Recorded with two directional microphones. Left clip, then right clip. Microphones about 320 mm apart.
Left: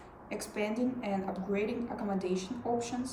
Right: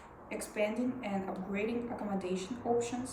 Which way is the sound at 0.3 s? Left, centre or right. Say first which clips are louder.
Right 1 dB; centre.